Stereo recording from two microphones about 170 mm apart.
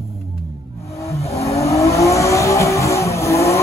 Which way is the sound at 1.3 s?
20° left (ahead or behind).